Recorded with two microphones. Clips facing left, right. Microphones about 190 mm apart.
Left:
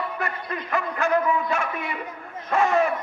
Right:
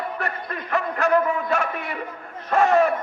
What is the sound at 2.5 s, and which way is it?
Speech, 40° right (ahead or behind).